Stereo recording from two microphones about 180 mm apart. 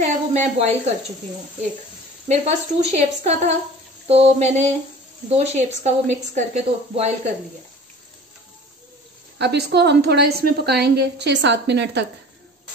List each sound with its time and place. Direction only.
0.0 s speech: 40° right (ahead or behind)
2.2 s a woman's voice: 35° right (ahead or behind)
9.4 s a woman's voice: 70° right (ahead or behind)